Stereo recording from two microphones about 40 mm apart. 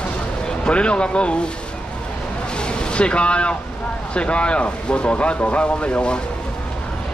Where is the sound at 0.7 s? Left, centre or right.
Left.